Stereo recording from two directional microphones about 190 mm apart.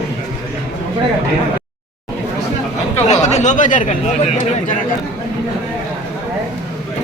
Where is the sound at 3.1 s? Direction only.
35° left (ahead or behind).